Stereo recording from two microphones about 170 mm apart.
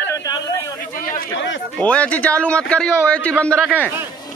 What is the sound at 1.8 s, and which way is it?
A man's voice, 5° left (ahead or behind).